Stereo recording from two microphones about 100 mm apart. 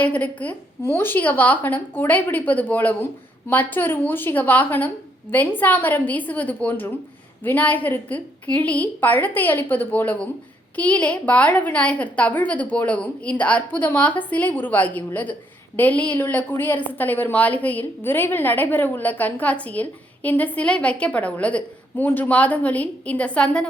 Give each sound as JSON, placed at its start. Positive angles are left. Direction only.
{"t": 0.0, "sound": "a woman's voice", "side_deg": 15}